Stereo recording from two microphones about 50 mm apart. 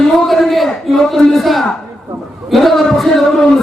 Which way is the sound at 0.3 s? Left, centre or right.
Centre.